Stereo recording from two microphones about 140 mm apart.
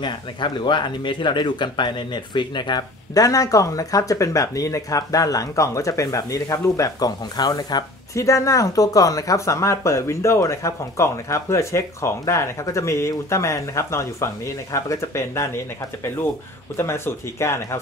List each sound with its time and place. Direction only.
0.0 s speech: 35° left (ahead or behind); by 17.7 s 20° left (ahead or behind)